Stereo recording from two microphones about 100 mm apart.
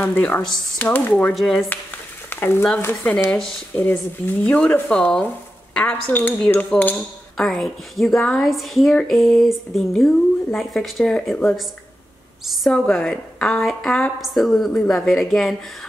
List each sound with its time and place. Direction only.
0.0 s speech: 20° left (ahead or behind)
1.3 s speech: centre (ahead or behind)
2.2 s frying: 20° left (ahead or behind)
2.8 s speech: 20° left (ahead or behind); by 15.5 s centre (ahead or behind)